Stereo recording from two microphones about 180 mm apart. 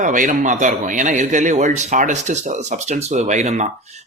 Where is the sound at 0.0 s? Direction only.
45° right (ahead or behind).